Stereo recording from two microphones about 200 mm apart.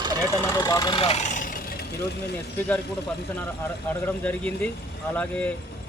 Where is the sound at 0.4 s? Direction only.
15° left (ahead or behind); by 1.8 s 40° left (ahead or behind).